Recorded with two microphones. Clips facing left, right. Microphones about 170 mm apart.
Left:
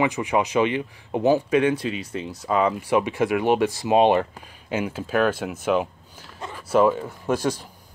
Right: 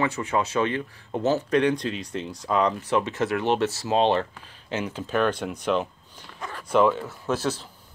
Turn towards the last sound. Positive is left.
turn(degrees=10)  # may be behind; listen again after turning